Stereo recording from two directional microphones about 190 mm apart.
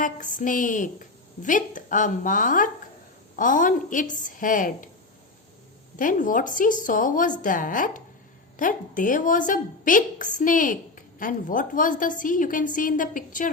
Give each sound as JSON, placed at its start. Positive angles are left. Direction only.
{"t": 0.0, "sound": "a woman's voice", "side_deg": 45}
{"t": 6.0, "sound": "a woman's voice", "side_deg": 45}